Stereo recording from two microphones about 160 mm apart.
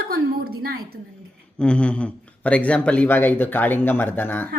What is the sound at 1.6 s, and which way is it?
Speech, 5° left (ahead or behind).